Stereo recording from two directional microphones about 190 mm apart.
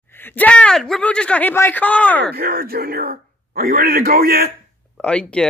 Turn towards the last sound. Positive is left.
turn(degrees=5)  # may be behind; listen again after turning